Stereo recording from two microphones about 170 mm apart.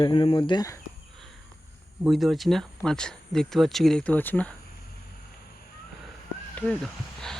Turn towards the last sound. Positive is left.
turn(degrees=5)  # may be behind; listen again after turning